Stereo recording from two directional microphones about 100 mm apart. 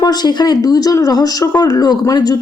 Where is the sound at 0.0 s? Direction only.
45° left (ahead or behind).